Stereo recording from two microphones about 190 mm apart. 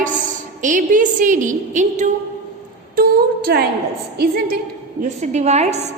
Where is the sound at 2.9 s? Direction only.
50° right (ahead or behind).